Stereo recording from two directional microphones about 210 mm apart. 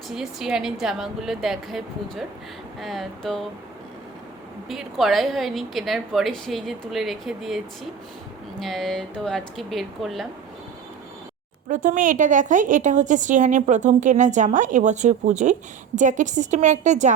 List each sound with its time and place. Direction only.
0.1 s a woman's voice: centre (ahead or behind)
4.7 s a woman's voice: centre (ahead or behind)
11.7 s a woman's voice: 35° right (ahead or behind)